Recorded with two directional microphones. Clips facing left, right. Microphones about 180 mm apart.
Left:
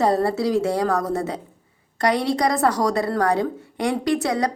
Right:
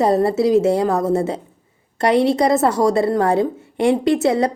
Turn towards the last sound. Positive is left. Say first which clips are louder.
# right 5 dB
turn(degrees=-25)  # may be behind; listen again after turning